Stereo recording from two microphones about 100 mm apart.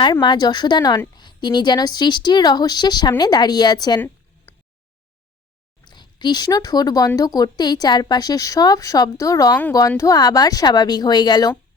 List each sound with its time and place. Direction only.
0.0 s a woman's voice: 50° left (ahead or behind)
5.8 s a woman's voice: 45° left (ahead or behind)